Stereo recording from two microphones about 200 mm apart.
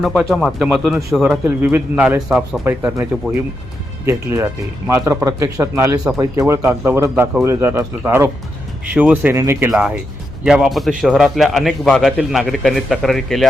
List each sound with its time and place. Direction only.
0.0 s a man's voice: centre (ahead or behind)